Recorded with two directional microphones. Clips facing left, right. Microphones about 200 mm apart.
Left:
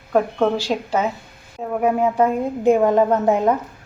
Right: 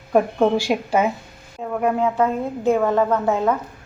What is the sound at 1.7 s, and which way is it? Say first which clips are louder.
A woman's voice: left 2 dB; 10° left (ahead or behind).